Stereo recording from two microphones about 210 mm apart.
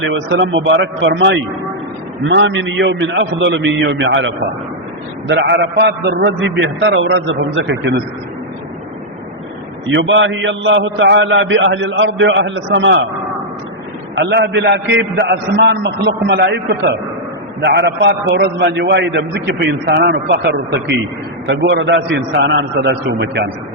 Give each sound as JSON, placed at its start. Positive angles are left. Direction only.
{"t": 0.0, "sound": "a man's voice", "side_deg": -60}
{"t": 5.3, "sound": "a man's voice", "side_deg": -55}
{"t": 9.9, "sound": "a man's voice", "side_deg": -60}
{"t": 14.2, "sound": "a man's voice", "side_deg": -55}